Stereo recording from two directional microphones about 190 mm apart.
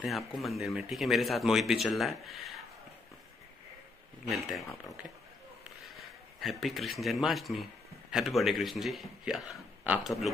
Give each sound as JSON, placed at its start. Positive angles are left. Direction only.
{"t": 0.0, "sound": "speech", "side_deg": 0}
{"t": 5.9, "sound": "speech", "side_deg": 0}